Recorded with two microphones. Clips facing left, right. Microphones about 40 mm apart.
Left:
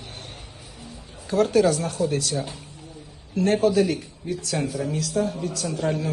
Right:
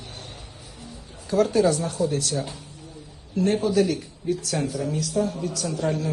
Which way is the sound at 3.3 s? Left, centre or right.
Left.